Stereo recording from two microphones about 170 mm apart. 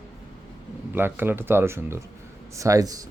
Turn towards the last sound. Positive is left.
turn(degrees=-20)  # may be behind; listen again after turning